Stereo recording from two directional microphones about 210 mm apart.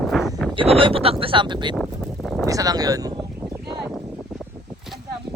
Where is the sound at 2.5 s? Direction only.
15° right (ahead or behind).